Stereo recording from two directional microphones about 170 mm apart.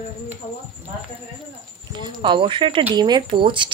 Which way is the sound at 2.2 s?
30° right (ahead or behind).